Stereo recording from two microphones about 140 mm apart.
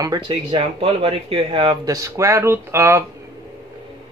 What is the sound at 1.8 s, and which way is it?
Speech, 25° right (ahead or behind).